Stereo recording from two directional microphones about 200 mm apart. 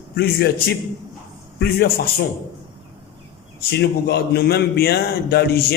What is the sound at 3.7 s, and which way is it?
Speech, 55° left (ahead or behind).